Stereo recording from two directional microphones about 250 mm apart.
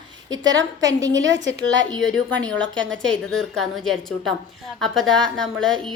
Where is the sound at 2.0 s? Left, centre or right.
Centre.